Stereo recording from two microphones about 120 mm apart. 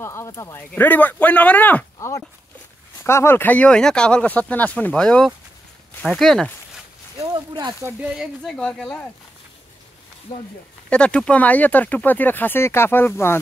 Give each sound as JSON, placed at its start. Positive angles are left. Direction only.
{"t": 0.0, "sound": "speech", "side_deg": 20}
{"t": 0.6, "sound": "speech", "side_deg": 15}
{"t": 2.0, "sound": "a sound", "side_deg": 25}
{"t": 3.0, "sound": "speech", "side_deg": 20}
{"t": 7.2, "sound": "a sound", "side_deg": -35}
{"t": 8.0, "sound": "speech", "side_deg": -5}
{"t": 8.5, "sound": "speech", "side_deg": 5}
{"t": 10.9, "sound": "speech", "side_deg": 10}